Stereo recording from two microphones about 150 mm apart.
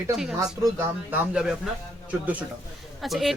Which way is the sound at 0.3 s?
20° right (ahead or behind).